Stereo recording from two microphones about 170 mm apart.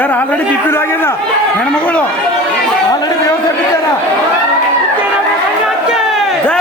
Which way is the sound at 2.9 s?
25° left (ahead or behind).